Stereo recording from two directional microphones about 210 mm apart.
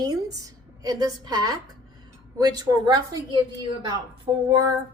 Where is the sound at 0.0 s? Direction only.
15° right (ahead or behind).